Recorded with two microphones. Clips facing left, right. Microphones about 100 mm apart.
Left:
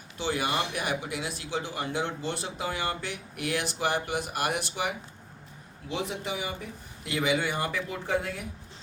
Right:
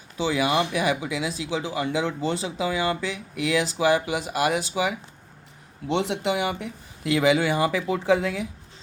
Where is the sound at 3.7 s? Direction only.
90° right.